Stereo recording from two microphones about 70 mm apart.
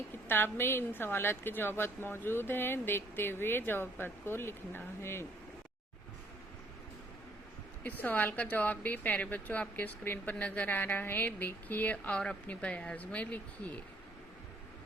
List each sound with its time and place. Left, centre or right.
0.3 s a woman's voice: left
7.9 s a woman's voice: left